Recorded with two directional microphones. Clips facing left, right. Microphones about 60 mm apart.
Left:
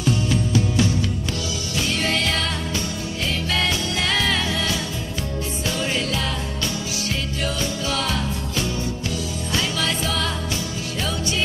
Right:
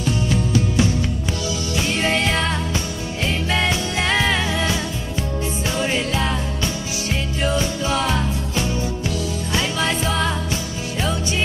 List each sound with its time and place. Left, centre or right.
1.7 s music: right